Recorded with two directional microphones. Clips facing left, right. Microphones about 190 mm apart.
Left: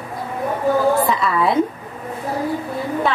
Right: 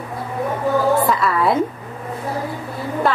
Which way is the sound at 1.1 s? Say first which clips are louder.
Right 1 dB; centre (ahead or behind).